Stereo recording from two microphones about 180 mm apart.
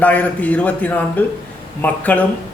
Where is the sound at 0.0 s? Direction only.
10° left (ahead or behind).